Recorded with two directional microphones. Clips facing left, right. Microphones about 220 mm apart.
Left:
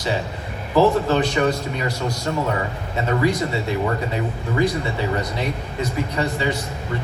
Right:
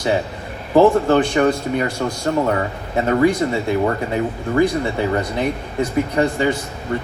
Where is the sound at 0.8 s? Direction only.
50° right (ahead or behind).